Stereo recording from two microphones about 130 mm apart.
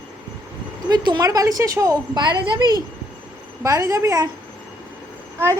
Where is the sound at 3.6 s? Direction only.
25° right (ahead or behind).